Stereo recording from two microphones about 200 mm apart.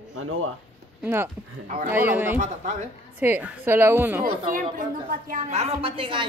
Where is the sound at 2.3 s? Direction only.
40° right (ahead or behind).